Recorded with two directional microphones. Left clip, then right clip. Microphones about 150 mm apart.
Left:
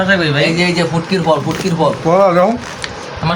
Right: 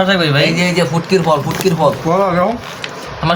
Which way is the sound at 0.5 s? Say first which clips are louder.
Even; 40° right (ahead or behind).